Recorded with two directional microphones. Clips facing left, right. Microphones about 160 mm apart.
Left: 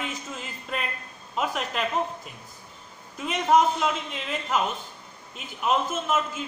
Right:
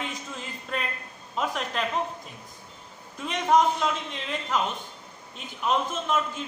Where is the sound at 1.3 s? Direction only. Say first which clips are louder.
Left 1 dB; 5° left (ahead or behind).